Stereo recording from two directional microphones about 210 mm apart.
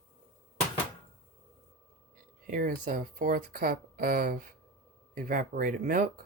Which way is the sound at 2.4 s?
40° right (ahead or behind).